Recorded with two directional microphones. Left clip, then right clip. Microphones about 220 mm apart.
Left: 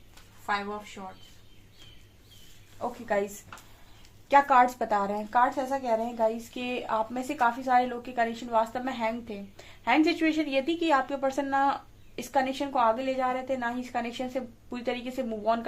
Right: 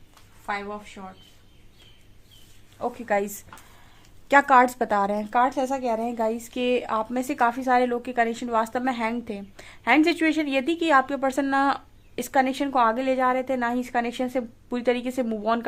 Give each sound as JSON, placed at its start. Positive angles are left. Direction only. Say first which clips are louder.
{"t": 0.5, "sound": "a woman's voice", "louder": "even", "side_deg": -40}
{"t": 3.1, "sound": "speech", "louder": "right 3 dB", "side_deg": -45}